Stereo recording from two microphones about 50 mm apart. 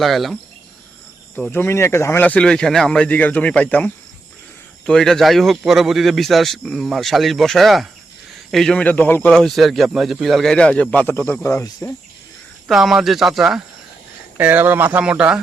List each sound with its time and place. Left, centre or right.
0.0 s a man's voice: centre
1.5 s speech: left
2.2 s a man's voice: left
2.5 s speech: centre
3.0 s speech: left
4.9 s a man's voice: centre
8.8 s a man's voice: left
9.3 s a man's voice: centre
10.4 s speech: centre
11.4 s speech: left
12.6 s a man's voice: centre
14.3 s speech: right